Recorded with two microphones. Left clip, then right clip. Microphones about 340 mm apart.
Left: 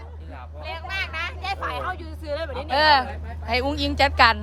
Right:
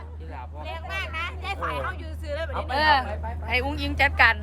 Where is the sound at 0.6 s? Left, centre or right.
Left.